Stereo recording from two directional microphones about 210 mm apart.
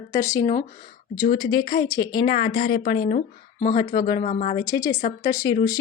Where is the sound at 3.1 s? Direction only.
40° left (ahead or behind).